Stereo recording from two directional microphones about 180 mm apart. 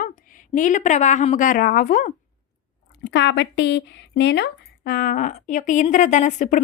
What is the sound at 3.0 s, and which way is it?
Speech, 75° left (ahead or behind).